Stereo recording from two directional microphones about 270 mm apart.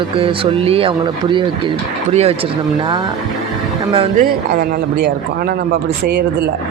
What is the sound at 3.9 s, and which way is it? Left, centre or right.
Speech, centre.